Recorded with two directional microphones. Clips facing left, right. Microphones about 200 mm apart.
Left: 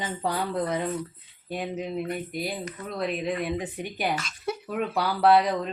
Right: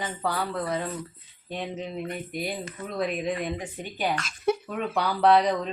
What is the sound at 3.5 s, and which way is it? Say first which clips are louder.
Speech: left 3 dB; 15° left (ahead or behind).